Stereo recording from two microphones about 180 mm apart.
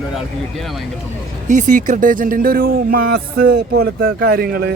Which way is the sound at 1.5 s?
45° right (ahead or behind).